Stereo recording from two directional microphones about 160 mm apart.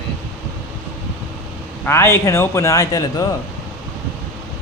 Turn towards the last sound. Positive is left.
turn(degrees=20)  # may be behind; listen again after turning